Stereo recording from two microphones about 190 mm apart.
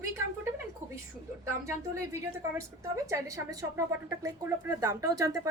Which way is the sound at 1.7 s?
15° right (ahead or behind).